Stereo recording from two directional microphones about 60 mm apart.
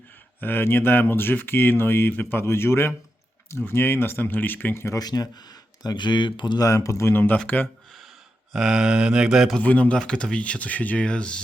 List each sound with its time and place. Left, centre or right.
0.3 s speech: left
4.7 s speech: left
4.9 s speech: left
6.6 s speech: left
7.1 s speech: left
8.5 s mantra: centre
9.6 s speech: left
10.0 s speech: centre